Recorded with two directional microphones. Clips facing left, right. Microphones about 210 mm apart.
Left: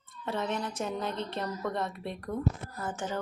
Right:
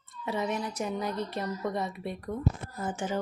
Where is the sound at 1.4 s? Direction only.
10° right (ahead or behind).